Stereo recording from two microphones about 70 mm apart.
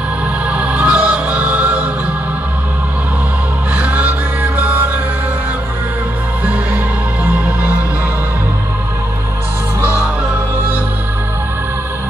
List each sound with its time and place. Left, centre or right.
0.5 s music: centre
3.7 s music: right
6.4 s music: centre